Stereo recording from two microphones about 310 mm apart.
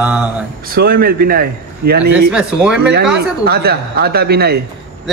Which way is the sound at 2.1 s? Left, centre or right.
Centre.